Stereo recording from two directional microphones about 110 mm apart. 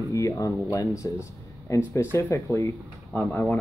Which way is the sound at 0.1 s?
30° left (ahead or behind).